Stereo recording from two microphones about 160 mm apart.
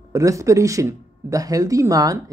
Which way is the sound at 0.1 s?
20° right (ahead or behind).